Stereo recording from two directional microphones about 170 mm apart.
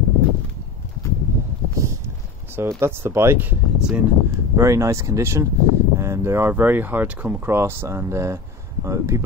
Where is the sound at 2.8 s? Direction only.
15° right (ahead or behind).